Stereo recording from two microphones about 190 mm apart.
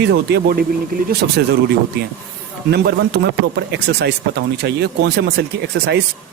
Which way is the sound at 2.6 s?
60° right (ahead or behind).